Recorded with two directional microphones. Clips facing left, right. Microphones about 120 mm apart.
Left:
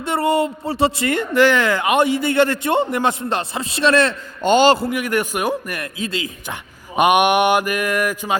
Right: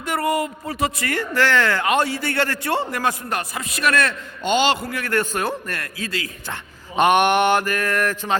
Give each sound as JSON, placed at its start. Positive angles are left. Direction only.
{"t": 0.0, "sound": "speech", "side_deg": 25}
{"t": 4.4, "sound": "a man's voice", "side_deg": 45}
{"t": 4.9, "sound": "a man's voice", "side_deg": 15}